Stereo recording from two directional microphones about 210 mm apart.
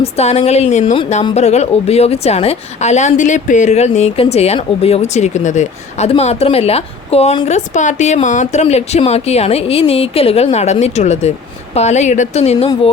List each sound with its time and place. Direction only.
0.0 s a woman's voice: 30° left (ahead or behind)